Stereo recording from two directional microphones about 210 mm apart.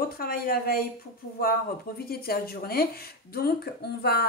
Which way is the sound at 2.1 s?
45° left (ahead or behind).